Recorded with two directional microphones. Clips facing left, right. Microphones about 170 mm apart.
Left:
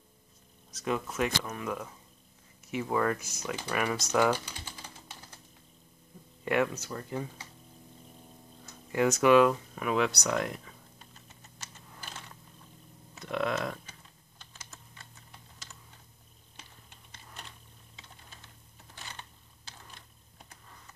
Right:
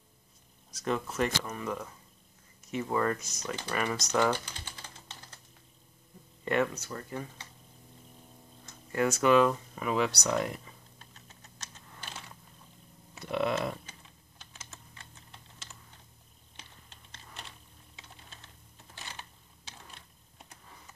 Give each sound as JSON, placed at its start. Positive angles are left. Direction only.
{"t": 0.8, "sound": "speech", "side_deg": 5}
{"t": 3.7, "sound": "typing", "side_deg": 10}
{"t": 6.4, "sound": "speech", "side_deg": 5}
{"t": 8.6, "sound": "tick-tock", "side_deg": 15}
{"t": 9.2, "sound": "speech", "side_deg": 5}
{"t": 11.9, "sound": "a sound", "side_deg": 5}
{"t": 13.2, "sound": "a sound", "side_deg": -5}
{"t": 14.4, "sound": "typing", "side_deg": 0}
{"t": 17.1, "sound": "typing", "side_deg": 0}